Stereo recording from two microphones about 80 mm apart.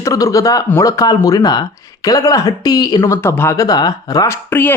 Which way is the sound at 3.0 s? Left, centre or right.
Left.